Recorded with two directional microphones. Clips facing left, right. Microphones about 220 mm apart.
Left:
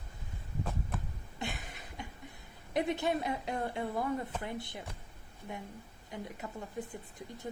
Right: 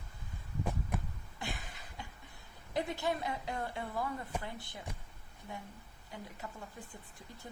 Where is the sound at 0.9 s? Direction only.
15° right (ahead or behind).